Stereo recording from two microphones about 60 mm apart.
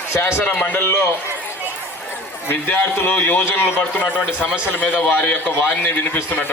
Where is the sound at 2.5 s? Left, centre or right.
Left.